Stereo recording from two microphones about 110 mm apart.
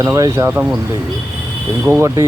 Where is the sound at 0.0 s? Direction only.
30° right (ahead or behind).